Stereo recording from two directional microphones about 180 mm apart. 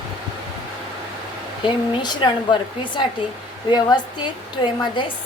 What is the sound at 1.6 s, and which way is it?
Speech, 25° left (ahead or behind).